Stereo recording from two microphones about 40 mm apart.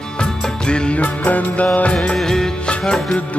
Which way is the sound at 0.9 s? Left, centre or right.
Left.